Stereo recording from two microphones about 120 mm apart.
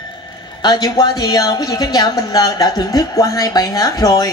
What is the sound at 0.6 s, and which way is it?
A woman's voice, 35° left (ahead or behind).